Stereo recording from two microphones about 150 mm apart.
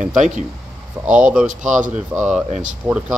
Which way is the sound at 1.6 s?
55° right (ahead or behind).